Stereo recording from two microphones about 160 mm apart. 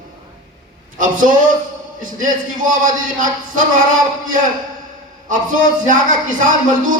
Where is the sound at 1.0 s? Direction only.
55° right (ahead or behind).